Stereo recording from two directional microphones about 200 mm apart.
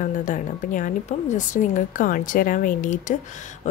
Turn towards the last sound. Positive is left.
turn(degrees=40)  # may be behind; listen again after turning